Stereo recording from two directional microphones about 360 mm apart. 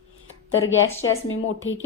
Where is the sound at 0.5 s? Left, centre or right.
Left.